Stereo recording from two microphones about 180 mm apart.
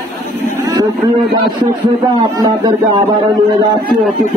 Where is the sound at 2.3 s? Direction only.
25° right (ahead or behind).